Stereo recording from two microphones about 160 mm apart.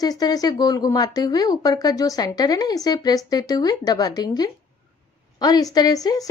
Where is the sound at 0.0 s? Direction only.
25° left (ahead or behind).